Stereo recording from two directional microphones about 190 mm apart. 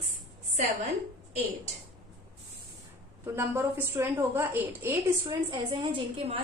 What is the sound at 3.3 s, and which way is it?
A woman's voice, 15° right (ahead or behind).